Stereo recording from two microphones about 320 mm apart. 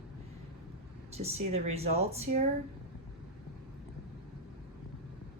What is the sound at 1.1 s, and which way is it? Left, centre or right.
Speech, centre.